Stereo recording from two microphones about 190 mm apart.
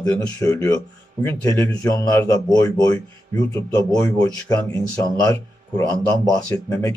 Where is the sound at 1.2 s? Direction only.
15° left (ahead or behind).